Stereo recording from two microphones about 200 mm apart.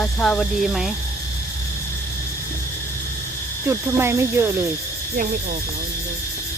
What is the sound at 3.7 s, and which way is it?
Speech, 15° right (ahead or behind).